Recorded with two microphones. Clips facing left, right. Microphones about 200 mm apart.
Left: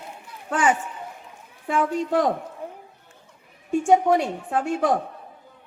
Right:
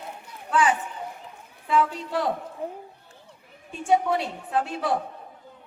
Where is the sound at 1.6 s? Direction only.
45° left (ahead or behind).